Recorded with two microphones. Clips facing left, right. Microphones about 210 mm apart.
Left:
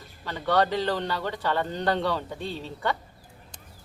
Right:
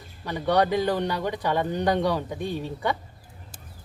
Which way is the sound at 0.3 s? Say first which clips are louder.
Right 2 dB; 15° right (ahead or behind).